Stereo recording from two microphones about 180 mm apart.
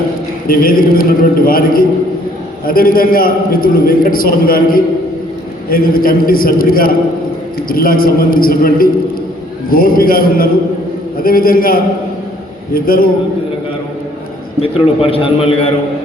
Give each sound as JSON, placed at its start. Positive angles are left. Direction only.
{"t": 0.4, "sound": "a man's voice", "side_deg": 55}
{"t": 14.6, "sound": "a man's voice", "side_deg": 30}